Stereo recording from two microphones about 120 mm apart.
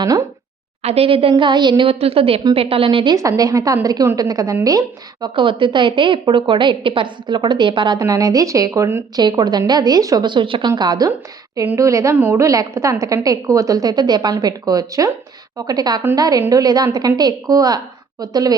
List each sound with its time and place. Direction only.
0.0 s a woman's voice: 30° right (ahead or behind)
0.8 s a woman's voice: 55° right (ahead or behind)
3.2 s a woman's voice: 30° right (ahead or behind)
5.3 s a woman's voice: 45° right (ahead or behind)
8.0 s a woman's voice: 30° right (ahead or behind)
9.1 s a woman's voice: 35° right (ahead or behind)
10.7 s a woman's voice: 35° right (ahead or behind)
11.5 s a woman's voice: 20° right (ahead or behind)